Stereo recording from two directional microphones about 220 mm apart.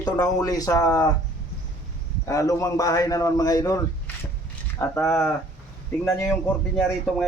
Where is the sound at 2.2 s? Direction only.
15° left (ahead or behind).